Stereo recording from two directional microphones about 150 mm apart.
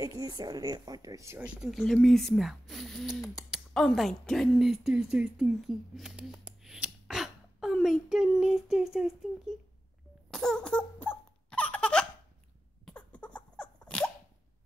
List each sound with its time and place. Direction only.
0.0 s speech: 25° right (ahead or behind)
1.4 s speech: 5° right (ahead or behind)
10.3 s laughter: 5° left (ahead or behind)
12.8 s sneeze: 10° left (ahead or behind)